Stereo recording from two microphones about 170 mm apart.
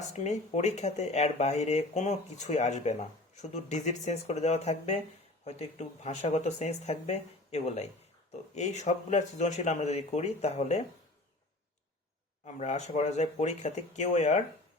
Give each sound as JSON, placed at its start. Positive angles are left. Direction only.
{"t": 0.1, "sound": "speech", "side_deg": 40}
{"t": 12.5, "sound": "speech", "side_deg": 40}